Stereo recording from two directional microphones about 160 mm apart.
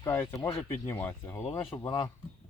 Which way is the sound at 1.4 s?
35° left (ahead or behind).